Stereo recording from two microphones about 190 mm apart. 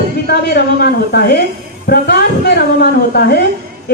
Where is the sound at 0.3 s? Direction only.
60° left (ahead or behind).